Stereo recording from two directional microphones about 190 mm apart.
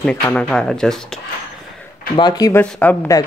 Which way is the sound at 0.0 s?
5° left (ahead or behind).